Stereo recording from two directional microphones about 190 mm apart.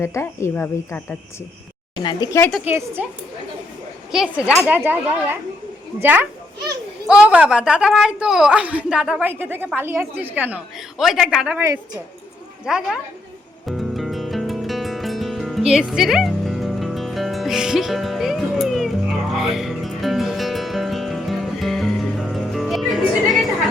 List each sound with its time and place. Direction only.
0.0 s speech: 15° left (ahead or behind)
2.0 s speech: 20° left (ahead or behind)
2.4 s a woman's voice: centre (ahead or behind)
2.6 s a woman's voice: 10° right (ahead or behind)
4.1 s a woman's voice: 5° right (ahead or behind)
12.6 s a woman's voice: 5° right (ahead or behind)
13.7 s music: centre (ahead or behind)